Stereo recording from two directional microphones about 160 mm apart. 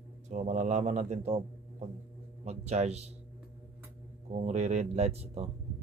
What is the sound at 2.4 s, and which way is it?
Speech, 40° right (ahead or behind).